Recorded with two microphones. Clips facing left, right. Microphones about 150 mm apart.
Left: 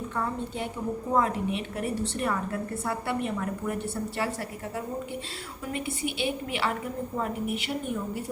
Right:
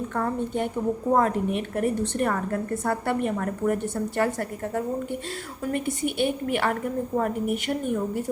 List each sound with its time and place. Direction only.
0.2 s a woman's voice: 50° right (ahead or behind)